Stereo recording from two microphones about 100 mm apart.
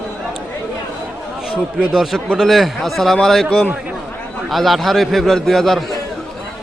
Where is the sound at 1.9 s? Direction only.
10° right (ahead or behind).